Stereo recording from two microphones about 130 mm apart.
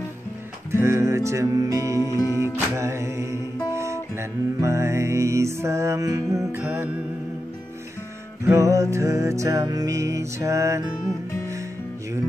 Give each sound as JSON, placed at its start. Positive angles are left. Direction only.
{"t": 0.7, "sound": "music", "side_deg": -20}
{"t": 2.1, "sound": "music", "side_deg": 25}
{"t": 2.4, "sound": "music", "side_deg": -20}
{"t": 8.5, "sound": "music", "side_deg": -25}